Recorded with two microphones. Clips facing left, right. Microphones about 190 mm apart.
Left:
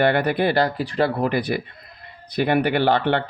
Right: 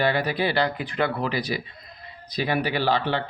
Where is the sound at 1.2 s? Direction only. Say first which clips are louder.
Left 5 dB; 55° left (ahead or behind).